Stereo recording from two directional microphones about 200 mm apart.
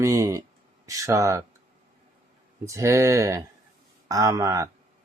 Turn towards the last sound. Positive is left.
turn(degrees=-15)  # may be behind; listen again after turning